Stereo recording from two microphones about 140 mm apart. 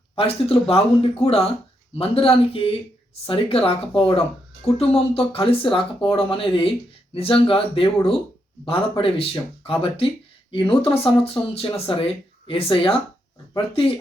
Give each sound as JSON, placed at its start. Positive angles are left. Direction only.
{"t": 0.2, "sound": "speech", "side_deg": 45}